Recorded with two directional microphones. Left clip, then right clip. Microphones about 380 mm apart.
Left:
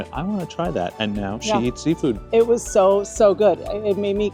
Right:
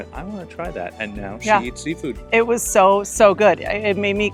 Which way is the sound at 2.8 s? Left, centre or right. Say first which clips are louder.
Right 3 dB; centre.